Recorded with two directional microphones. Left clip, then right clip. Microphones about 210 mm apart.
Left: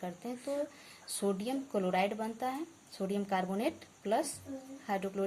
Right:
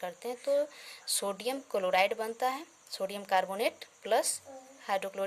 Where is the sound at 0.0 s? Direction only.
40° right (ahead or behind).